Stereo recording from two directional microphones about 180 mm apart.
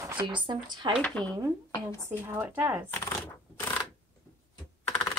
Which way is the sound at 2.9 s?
15° left (ahead or behind).